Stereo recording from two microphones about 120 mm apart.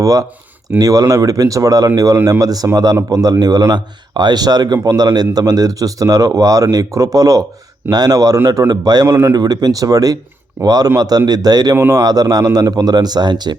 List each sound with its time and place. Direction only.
0.0 s speech: 30° right (ahead or behind)